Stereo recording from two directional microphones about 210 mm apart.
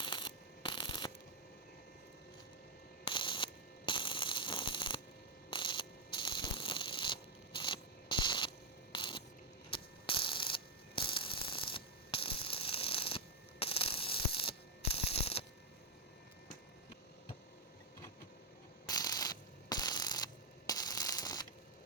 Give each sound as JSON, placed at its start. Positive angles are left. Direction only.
{"t": 0.0, "sound": "mechanisms", "side_deg": 20}
{"t": 3.1, "sound": "ratchet", "side_deg": 25}
{"t": 5.5, "sound": "a sound", "side_deg": 25}
{"t": 9.6, "sound": "ratchet", "side_deg": 25}
{"t": 14.9, "sound": "a sound", "side_deg": 30}
{"t": 18.9, "sound": "ratchet", "side_deg": 20}